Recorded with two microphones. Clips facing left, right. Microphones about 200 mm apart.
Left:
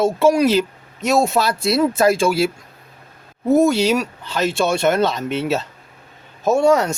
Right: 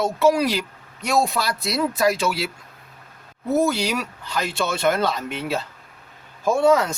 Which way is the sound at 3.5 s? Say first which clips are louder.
Left 6 dB; 25° left (ahead or behind).